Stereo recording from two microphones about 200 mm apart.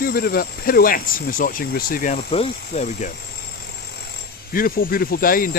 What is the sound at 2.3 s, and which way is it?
Speech, 30° left (ahead or behind).